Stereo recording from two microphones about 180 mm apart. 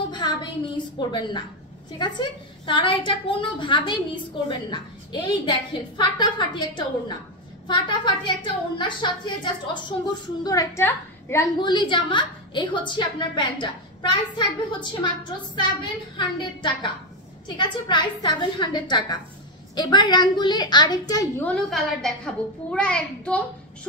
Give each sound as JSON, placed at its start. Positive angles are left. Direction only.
{"t": 0.1, "sound": "a sound", "side_deg": 25}
{"t": 0.9, "sound": "a woman's voice", "side_deg": 25}
{"t": 11.6, "sound": "a woman's voice", "side_deg": 25}
{"t": 21.5, "sound": "a child's voice", "side_deg": 0}